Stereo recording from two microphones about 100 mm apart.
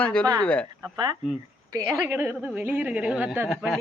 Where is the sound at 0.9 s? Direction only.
50° right (ahead or behind).